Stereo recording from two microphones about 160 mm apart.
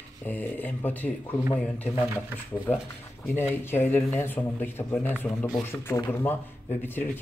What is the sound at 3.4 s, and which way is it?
A man's voice, 15° left (ahead or behind).